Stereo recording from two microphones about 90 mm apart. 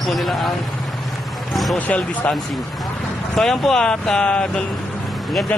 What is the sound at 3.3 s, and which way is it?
Speech, 5° left (ahead or behind).